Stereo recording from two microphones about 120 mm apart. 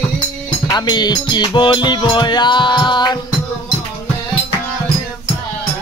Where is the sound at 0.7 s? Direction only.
35° left (ahead or behind).